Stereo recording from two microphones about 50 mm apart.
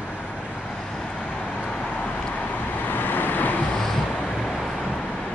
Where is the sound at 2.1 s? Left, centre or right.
Left.